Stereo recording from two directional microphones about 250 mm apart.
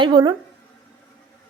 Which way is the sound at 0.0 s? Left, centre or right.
Centre.